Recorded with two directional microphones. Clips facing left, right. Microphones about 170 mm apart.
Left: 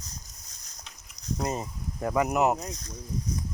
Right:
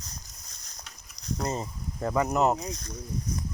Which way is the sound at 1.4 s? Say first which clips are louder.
Even; 10° left (ahead or behind).